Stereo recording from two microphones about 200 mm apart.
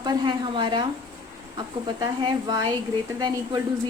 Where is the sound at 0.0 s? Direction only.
20° right (ahead or behind).